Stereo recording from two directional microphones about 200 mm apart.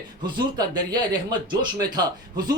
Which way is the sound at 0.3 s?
20° right (ahead or behind).